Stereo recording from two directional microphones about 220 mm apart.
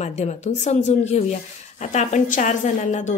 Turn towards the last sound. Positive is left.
turn(degrees=35)  # may be behind; listen again after turning